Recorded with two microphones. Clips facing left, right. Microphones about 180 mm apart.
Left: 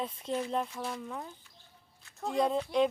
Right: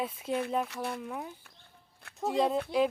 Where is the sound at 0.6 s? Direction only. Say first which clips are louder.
Right 2 dB; 65° right (ahead or behind).